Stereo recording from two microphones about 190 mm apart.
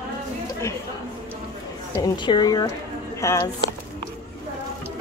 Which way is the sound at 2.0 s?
20° left (ahead or behind).